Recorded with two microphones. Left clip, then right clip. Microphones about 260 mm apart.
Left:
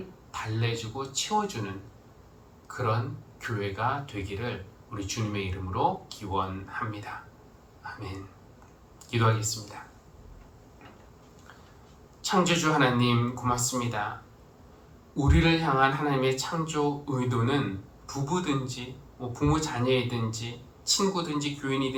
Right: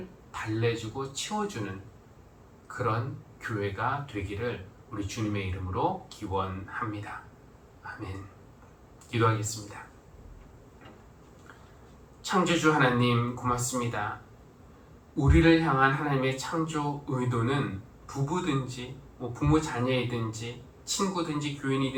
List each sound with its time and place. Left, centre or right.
0.3 s speech: left
2.6 s a sound: left
3.4 s speech: left
7.8 s a sound: left
9.0 s speech: left
12.2 s speech: left
15.1 s speech: left